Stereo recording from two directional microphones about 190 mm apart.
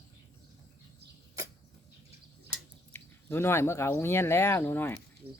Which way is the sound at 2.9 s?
10° left (ahead or behind).